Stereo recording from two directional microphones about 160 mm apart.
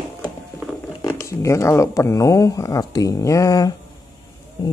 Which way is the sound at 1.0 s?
20° left (ahead or behind).